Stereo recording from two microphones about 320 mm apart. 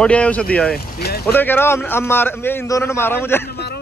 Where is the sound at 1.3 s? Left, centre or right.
Centre.